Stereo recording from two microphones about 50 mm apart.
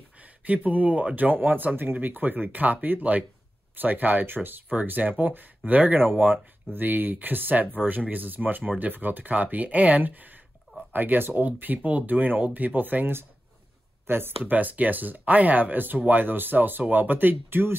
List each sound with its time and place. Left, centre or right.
0.5 s speech: right